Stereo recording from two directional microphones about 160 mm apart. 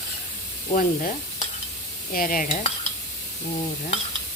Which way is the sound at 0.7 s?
55° left (ahead or behind).